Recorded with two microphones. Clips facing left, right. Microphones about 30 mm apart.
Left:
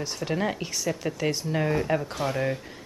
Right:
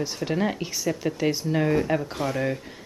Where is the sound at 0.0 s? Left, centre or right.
Centre.